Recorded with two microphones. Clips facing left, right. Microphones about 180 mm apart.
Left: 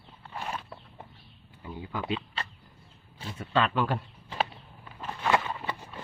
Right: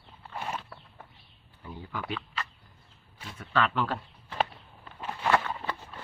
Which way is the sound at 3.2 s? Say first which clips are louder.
Left 4 dB; 25° left (ahead or behind).